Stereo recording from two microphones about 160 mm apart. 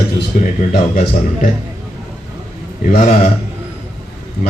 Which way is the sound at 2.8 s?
50° left (ahead or behind).